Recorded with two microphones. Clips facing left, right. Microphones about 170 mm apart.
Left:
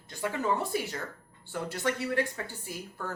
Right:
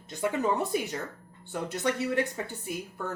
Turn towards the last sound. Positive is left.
turn(degrees=-20)  # may be behind; listen again after turning